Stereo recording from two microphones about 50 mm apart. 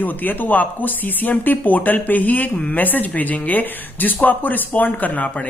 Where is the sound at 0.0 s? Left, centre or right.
Left.